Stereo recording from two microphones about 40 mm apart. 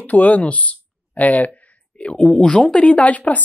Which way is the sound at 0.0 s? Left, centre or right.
Left.